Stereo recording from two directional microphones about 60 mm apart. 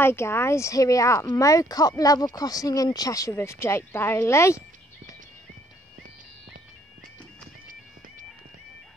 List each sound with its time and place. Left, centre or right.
0.0 s speech: left
3.3 s speech: left